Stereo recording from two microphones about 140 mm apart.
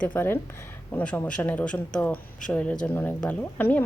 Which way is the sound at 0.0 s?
15° left (ahead or behind).